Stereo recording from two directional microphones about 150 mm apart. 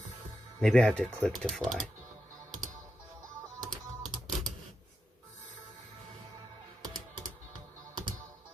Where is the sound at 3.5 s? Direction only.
25° right (ahead or behind).